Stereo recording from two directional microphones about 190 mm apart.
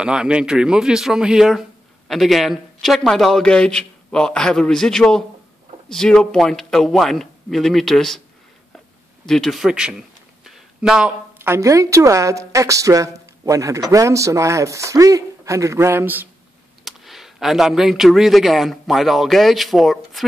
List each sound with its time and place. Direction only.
0.0 s speech: 5° right (ahead or behind)
9.2 s a man's voice: centre (ahead or behind)